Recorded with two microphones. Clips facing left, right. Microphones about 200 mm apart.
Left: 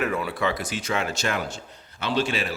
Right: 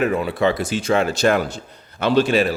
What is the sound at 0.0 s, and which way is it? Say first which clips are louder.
Speech: right 7 dB; 25° right (ahead or behind).